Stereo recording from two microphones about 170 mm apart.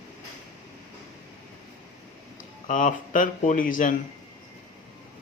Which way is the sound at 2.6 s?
50° left (ahead or behind).